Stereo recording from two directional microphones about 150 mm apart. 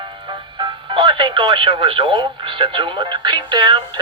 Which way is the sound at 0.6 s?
30° right (ahead or behind).